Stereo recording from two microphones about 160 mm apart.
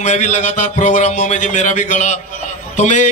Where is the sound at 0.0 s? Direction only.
45° left (ahead or behind).